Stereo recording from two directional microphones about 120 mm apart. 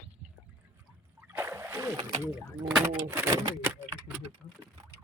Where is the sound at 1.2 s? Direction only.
15° right (ahead or behind).